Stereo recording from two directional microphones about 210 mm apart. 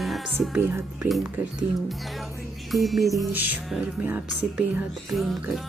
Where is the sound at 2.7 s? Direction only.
Centre (ahead or behind).